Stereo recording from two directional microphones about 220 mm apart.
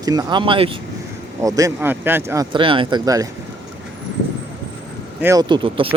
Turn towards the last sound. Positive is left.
turn(degrees=-25)  # may be behind; listen again after turning